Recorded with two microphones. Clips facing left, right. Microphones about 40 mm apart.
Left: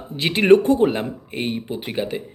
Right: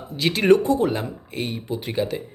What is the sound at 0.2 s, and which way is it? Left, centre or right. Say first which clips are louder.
Speech: left 3 dB; left.